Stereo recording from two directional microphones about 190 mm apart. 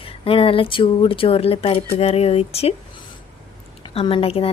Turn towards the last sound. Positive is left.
turn(degrees=30)  # may be behind; listen again after turning